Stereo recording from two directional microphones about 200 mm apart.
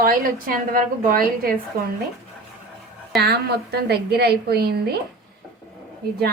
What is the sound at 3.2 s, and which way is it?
A woman's voice, 55° right (ahead or behind).